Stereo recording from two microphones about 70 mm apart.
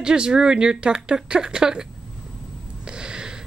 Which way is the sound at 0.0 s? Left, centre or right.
Centre.